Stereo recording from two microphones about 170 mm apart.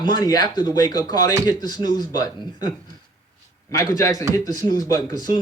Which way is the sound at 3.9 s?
20° left (ahead or behind).